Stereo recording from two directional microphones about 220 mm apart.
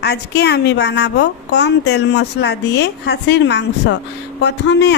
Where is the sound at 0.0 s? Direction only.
50° left (ahead or behind).